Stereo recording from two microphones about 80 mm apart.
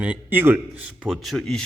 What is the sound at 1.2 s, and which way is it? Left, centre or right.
Speech, centre.